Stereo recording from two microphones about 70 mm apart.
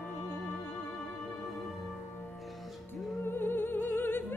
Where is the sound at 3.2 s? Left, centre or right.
Left.